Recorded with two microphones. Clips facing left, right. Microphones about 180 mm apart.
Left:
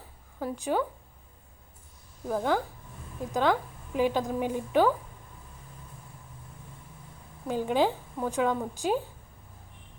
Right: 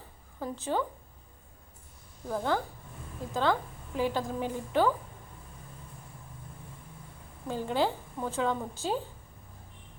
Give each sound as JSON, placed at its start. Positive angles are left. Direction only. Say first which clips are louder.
{"t": 0.3, "sound": "a woman's voice", "louder": "left 3 dB", "side_deg": 10}
{"t": 2.3, "sound": "a woman's voice", "louder": "left 3 dB", "side_deg": 10}
{"t": 7.4, "sound": "a woman's voice", "louder": "left 3 dB", "side_deg": 15}